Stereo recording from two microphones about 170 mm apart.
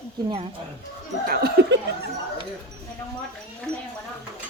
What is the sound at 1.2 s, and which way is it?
Speech, 70° right (ahead or behind).